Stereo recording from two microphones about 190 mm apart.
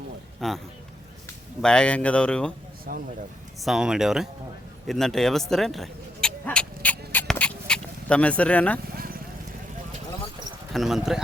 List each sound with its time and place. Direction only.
0.3 s speech: centre (ahead or behind)
1.6 s speech: 5° left (ahead or behind)
2.9 s speech: 50° right (ahead or behind)
3.6 s speech: centre (ahead or behind)
4.9 s vehicle: centre (ahead or behind)
10.7 s speech: centre (ahead or behind)